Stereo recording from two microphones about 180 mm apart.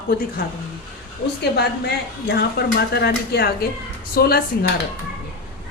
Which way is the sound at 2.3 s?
65° left (ahead or behind).